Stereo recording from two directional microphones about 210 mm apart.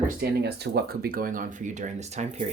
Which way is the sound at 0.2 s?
50° right (ahead or behind).